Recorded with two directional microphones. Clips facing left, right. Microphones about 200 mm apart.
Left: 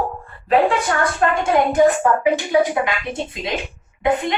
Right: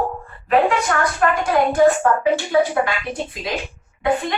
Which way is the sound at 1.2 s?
25° left (ahead or behind).